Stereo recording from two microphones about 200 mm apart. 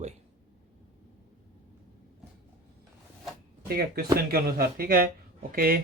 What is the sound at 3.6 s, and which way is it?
Speech, 50° right (ahead or behind).